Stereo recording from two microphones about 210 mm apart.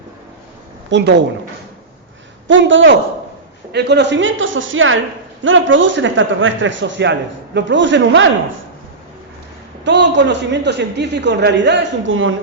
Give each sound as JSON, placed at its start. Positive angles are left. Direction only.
{"t": 0.9, "sound": "speech", "side_deg": -55}
{"t": 2.5, "sound": "a man's voice", "side_deg": -65}
{"t": 9.8, "sound": "a man's voice", "side_deg": -55}